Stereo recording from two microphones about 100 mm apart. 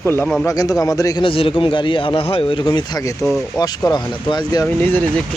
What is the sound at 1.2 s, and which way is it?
A man's voice, 65° left (ahead or behind).